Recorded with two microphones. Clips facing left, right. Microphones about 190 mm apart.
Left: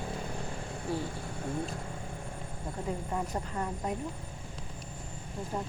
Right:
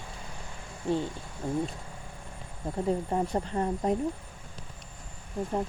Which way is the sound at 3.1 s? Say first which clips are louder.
Right 6 dB; 30° right (ahead or behind).